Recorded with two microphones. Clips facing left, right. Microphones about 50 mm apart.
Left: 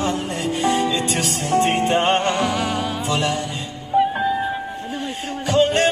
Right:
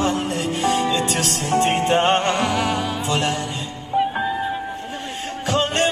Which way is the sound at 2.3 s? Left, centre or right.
Centre.